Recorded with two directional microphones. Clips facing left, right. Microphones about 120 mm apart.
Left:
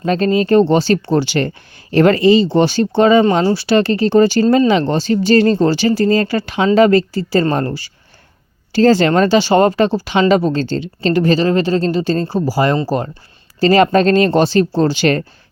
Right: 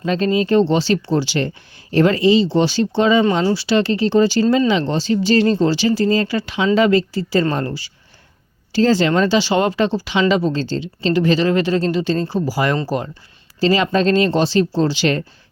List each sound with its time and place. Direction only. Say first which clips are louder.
0.0 s speech: left 3 dB; 45° left (ahead or behind); by 13.0 s 30° left (ahead or behind)
13.6 s speech: left 5 dB; 50° left (ahead or behind)